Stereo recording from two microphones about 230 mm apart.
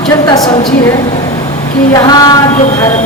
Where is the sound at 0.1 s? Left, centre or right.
Centre.